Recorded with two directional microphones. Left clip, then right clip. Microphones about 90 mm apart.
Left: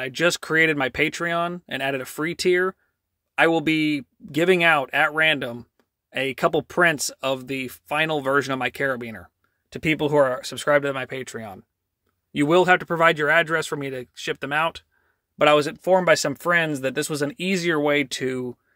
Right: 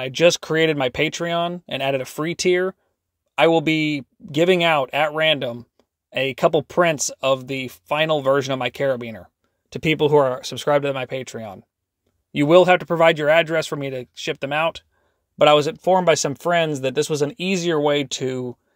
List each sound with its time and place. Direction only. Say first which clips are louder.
0.0 s speech: right 5 dB; 30° right (ahead or behind)
9.7 s speech: right 5 dB; 35° right (ahead or behind); by 18.6 s 10° right (ahead or behind)